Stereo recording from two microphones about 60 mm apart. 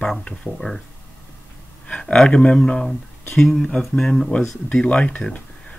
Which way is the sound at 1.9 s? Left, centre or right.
Centre.